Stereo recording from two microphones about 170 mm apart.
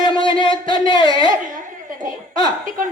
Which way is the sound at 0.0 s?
30° left (ahead or behind).